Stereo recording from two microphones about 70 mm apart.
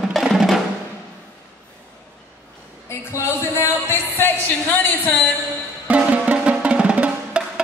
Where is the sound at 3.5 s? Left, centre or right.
Left.